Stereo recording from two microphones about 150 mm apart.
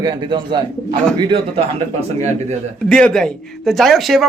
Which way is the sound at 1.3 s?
40° right (ahead or behind).